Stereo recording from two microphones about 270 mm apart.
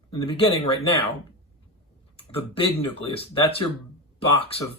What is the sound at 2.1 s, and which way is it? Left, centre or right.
Speech, left.